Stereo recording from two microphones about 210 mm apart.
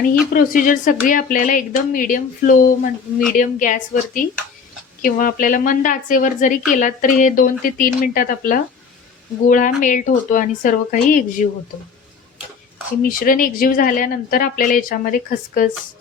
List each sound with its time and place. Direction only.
0.3 s speech: 40° left (ahead or behind)
13.0 s speech: 40° left (ahead or behind)